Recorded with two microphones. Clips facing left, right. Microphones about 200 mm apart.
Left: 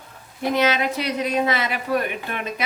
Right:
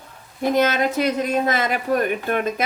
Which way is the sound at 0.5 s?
50° right (ahead or behind).